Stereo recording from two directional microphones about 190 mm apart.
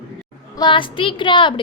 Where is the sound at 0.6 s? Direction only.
25° left (ahead or behind).